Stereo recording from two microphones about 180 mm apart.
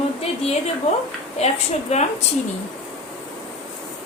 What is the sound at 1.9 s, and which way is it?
Speech, 35° left (ahead or behind).